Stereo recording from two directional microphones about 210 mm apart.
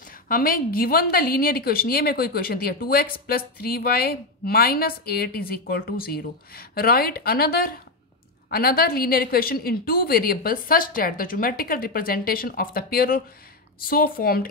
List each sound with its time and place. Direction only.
0.3 s a woman's voice: 45° left (ahead or behind)